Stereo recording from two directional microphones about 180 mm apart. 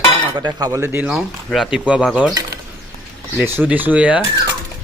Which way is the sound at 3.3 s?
10° right (ahead or behind).